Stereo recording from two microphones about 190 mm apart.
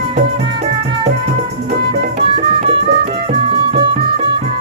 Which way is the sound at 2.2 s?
30° right (ahead or behind).